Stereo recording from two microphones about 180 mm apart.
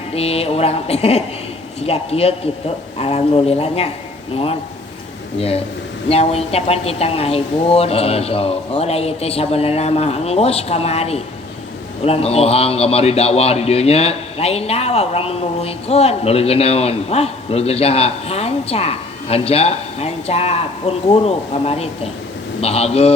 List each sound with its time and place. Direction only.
0.1 s a man's voice: 35° left (ahead or behind)
5.4 s a man's voice: 35° left (ahead or behind)